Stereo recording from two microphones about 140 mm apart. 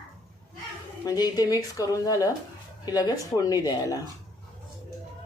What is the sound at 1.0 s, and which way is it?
A woman's voice, 25° left (ahead or behind).